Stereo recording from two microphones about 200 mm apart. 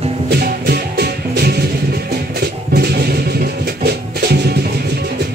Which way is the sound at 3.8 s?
55° right (ahead or behind).